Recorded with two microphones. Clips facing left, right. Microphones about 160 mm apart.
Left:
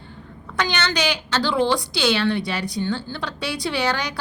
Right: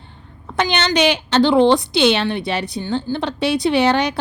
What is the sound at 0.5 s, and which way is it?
A woman's voice, 20° right (ahead or behind).